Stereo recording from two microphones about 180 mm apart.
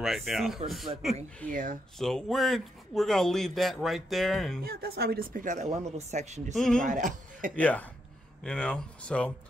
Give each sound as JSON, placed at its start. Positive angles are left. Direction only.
{"t": 0.0, "sound": "speech", "side_deg": 0}
{"t": 1.5, "sound": "speech", "side_deg": -50}
{"t": 2.0, "sound": "speech", "side_deg": 0}
{"t": 4.6, "sound": "speech", "side_deg": -60}
{"t": 6.5, "sound": "speech", "side_deg": 5}
{"t": 6.8, "sound": "speech", "side_deg": -45}
{"t": 7.5, "sound": "speech", "side_deg": 10}